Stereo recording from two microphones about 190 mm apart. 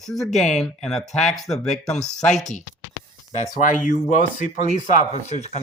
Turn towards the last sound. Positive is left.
turn(degrees=35)  # may be behind; listen again after turning